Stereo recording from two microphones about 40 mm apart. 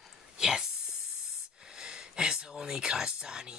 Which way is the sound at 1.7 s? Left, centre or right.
Centre.